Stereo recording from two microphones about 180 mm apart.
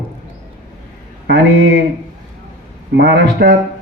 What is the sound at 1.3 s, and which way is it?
Speech, 80° right.